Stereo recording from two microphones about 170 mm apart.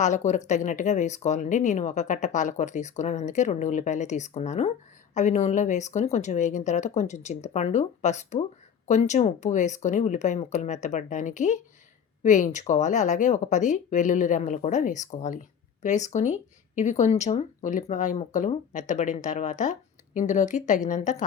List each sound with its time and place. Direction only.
0.0 s speech: 45° left (ahead or behind)